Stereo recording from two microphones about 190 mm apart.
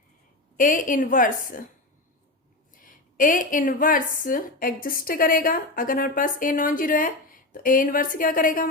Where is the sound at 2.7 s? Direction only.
45° left (ahead or behind).